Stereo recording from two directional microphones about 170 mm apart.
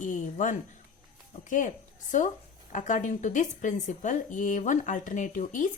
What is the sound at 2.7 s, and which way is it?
Speech, 45° left (ahead or behind).